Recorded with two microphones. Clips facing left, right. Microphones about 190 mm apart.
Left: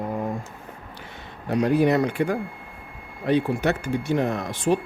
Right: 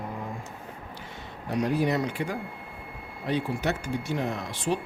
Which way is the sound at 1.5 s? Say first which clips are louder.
Left 6 dB; 60° left (ahead or behind).